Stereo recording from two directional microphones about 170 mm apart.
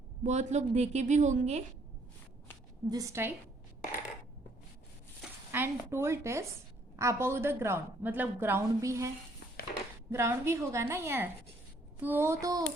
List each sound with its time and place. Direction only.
0.2 s a woman's voice: 40° right (ahead or behind)
2.9 s a woman's voice: 20° right (ahead or behind)
5.5 s a woman's voice: 15° right (ahead or behind)
9.7 s a sound: 60° left (ahead or behind)
10.1 s a woman's voice: 15° right (ahead or behind)